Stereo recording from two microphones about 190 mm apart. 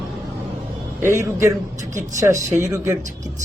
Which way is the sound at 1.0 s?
15° right (ahead or behind).